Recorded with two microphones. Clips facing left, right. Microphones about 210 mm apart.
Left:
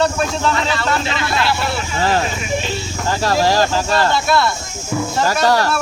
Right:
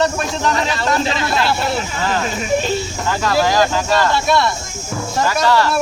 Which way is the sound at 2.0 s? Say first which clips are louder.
Left 2 dB; 35° left (ahead or behind).